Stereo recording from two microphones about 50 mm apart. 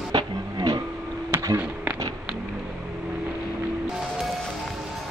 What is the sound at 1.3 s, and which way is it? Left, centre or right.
Music, right.